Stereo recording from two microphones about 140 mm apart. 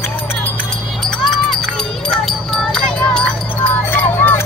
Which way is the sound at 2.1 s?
5° left (ahead or behind).